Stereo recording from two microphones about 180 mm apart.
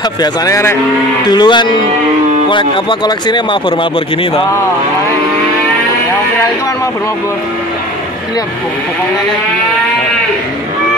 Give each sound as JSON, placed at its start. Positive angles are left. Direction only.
{"t": 0.2, "sound": "a man's voice", "side_deg": 15}